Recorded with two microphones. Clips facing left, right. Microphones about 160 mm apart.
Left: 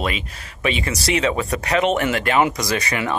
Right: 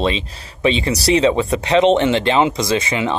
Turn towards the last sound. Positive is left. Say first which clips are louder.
# right 4 dB
turn(degrees=-20)  # may be behind; listen again after turning